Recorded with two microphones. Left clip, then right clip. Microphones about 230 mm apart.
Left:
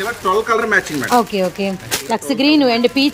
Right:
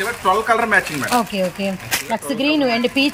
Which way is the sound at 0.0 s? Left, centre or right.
Centre.